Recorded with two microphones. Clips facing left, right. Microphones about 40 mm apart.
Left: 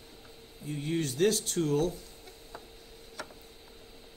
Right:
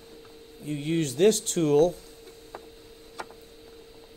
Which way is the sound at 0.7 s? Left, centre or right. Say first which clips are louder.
Right 5 dB; right.